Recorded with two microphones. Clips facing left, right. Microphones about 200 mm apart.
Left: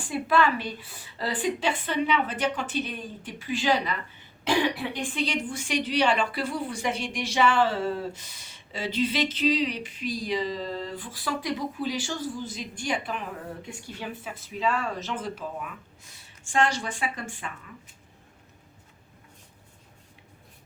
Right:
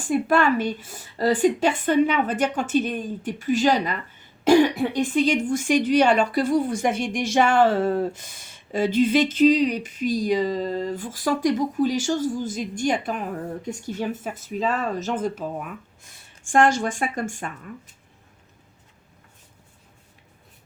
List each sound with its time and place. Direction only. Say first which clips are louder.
0.0 s a woman's voice: right 4 dB; 45° right (ahead or behind)